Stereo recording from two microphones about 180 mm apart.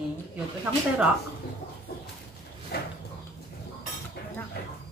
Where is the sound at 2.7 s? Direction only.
60° left (ahead or behind).